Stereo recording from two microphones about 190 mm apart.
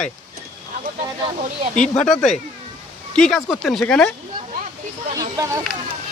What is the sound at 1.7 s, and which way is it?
Speech, 5° left (ahead or behind).